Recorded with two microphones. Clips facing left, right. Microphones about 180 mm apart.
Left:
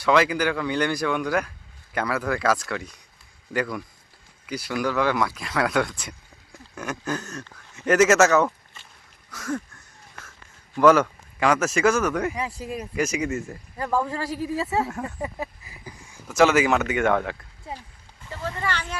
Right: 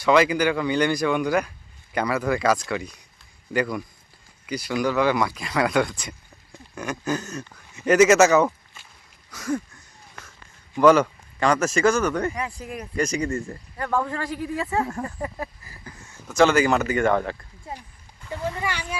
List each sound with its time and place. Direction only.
0.0 s speech: centre (ahead or behind)
9.3 s a sound: centre (ahead or behind)
10.8 s speech: centre (ahead or behind)
14.2 s a woman's voice: 35° left (ahead or behind)
14.7 s speech: 5° left (ahead or behind)
15.2 s speech: 20° left (ahead or behind); by 17.3 s centre (ahead or behind)
18.3 s speech: 10° right (ahead or behind)